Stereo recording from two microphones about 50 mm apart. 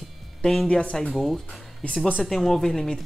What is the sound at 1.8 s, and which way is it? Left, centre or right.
Speech, left.